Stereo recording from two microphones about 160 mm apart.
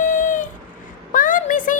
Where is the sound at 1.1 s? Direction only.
55° left (ahead or behind).